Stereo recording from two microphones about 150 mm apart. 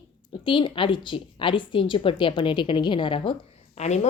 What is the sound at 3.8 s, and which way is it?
Speech, 50° left (ahead or behind).